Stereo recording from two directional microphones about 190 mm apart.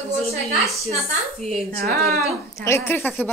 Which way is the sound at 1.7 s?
50° right (ahead or behind).